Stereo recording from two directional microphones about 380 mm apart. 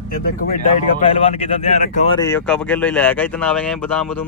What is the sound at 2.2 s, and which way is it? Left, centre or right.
Speech, centre.